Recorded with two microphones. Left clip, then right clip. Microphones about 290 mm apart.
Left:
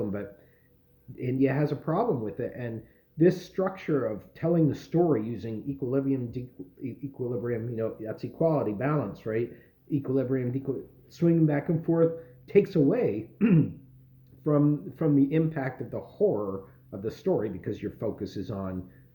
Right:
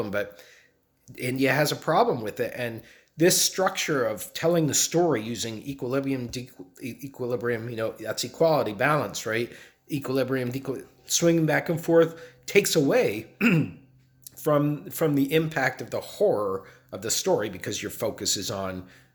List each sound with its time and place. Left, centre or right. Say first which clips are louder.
1.1 s speech: right 3 dB; centre